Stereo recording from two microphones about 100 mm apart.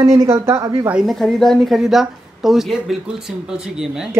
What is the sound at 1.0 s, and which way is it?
A woman's voice, 5° left (ahead or behind).